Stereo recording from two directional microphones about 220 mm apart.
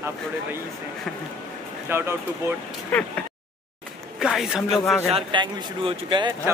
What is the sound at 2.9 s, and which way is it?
Speech, 5° left (ahead or behind).